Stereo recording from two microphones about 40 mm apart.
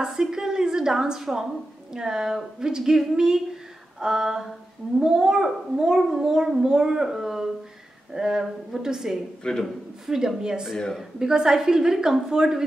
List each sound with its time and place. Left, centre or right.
0.0 s a woman's voice: centre
9.5 s a man's voice: left
10.0 s a woman's voice: centre